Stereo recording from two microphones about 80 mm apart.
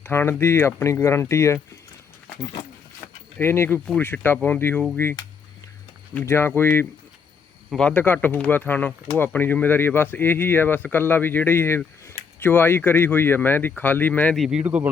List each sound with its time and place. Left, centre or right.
0.0 s speech: left
3.4 s speech: left
6.2 s speech: left
14.3 s speech: centre
14.6 s speech: centre